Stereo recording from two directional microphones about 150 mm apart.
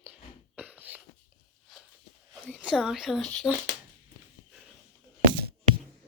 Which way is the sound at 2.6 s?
5° right (ahead or behind).